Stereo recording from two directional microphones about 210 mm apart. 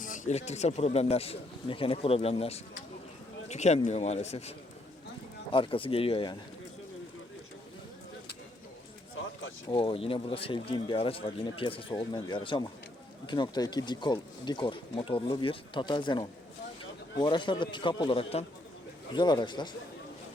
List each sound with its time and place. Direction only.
0.0 s speech: 35° left (ahead or behind)
9.6 s speech: 25° left (ahead or behind)